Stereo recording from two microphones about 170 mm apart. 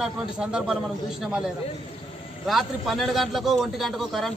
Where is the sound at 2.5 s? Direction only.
Centre (ahead or behind).